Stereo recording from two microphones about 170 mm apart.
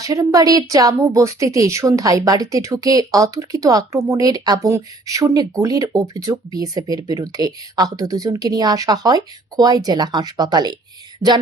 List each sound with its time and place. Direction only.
0.0 s a woman's voice: 20° right (ahead or behind)